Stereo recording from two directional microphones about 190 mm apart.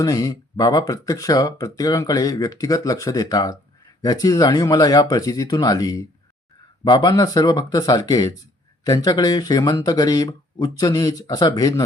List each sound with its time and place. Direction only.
0.0 s speech: 20° left (ahead or behind)